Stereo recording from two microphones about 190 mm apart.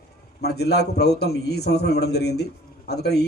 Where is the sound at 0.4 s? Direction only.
60° left (ahead or behind).